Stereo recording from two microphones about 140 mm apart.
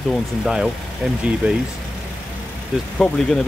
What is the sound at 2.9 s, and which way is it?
Speech, 5° left (ahead or behind).